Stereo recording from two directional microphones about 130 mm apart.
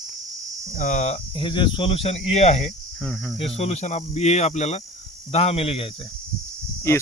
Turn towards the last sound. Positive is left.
turn(degrees=20)  # may be behind; listen again after turning